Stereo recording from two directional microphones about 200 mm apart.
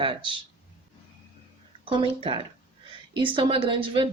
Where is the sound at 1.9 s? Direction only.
25° right (ahead or behind).